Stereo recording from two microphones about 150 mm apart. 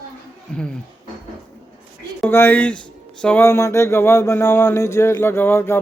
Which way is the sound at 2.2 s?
15° left (ahead or behind).